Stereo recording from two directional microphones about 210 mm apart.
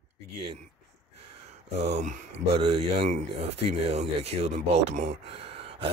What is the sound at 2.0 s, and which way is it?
Speech, 30° right (ahead or behind).